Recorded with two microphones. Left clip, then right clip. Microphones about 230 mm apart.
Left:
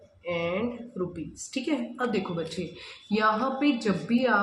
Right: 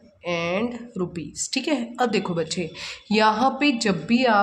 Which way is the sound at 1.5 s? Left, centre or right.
Right.